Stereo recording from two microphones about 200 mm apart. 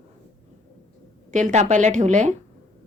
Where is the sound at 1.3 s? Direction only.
40° right (ahead or behind).